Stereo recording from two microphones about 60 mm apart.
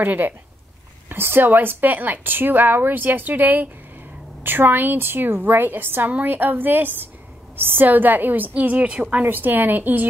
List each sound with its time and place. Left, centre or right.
0.0 s a woman's voice: right
9.2 s a woman's voice: right